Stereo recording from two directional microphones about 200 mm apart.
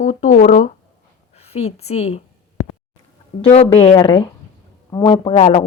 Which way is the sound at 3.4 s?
30° left (ahead or behind).